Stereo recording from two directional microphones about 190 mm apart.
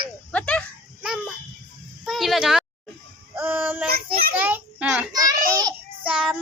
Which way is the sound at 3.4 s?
10° right (ahead or behind).